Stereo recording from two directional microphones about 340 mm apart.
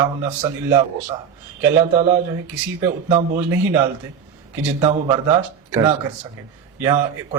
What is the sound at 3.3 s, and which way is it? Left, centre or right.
Speech, centre.